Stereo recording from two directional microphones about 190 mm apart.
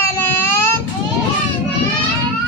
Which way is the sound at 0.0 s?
10° left (ahead or behind).